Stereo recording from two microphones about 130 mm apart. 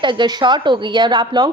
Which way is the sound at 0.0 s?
35° right (ahead or behind).